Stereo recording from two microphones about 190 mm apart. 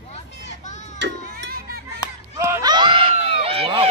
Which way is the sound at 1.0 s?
60° right (ahead or behind).